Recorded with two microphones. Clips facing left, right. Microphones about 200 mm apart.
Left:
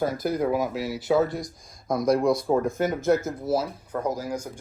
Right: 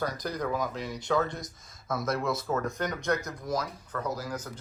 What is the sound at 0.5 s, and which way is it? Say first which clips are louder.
Speech: left 6 dB; 10° left (ahead or behind).